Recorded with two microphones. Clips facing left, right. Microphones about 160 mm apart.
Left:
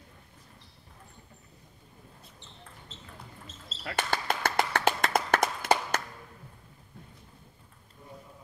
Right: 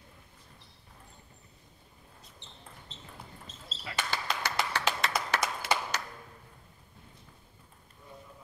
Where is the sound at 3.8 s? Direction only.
55° left (ahead or behind).